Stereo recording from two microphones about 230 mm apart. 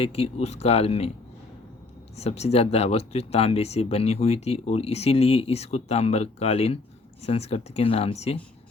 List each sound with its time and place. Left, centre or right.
0.0 s speech: left
2.1 s speech: left